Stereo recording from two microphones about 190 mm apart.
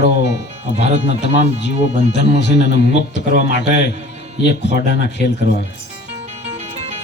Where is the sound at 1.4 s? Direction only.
35° right (ahead or behind).